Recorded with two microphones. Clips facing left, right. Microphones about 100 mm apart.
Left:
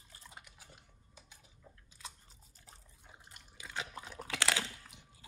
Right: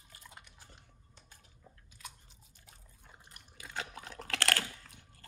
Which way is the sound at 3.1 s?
5° left (ahead or behind).